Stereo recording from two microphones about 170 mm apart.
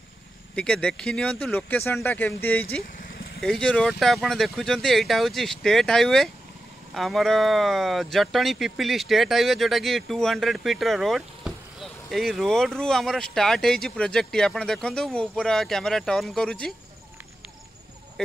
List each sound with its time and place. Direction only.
0.6 s speech: 5° left (ahead or behind)
3.0 s vehicle: 60° left (ahead or behind)
3.3 s speech: 5° left (ahead or behind)